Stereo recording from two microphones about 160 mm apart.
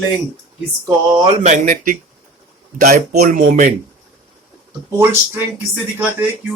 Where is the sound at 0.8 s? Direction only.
30° right (ahead or behind).